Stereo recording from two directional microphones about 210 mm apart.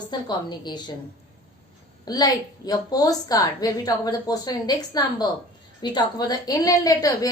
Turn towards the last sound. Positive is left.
turn(degrees=15)  # may be behind; listen again after turning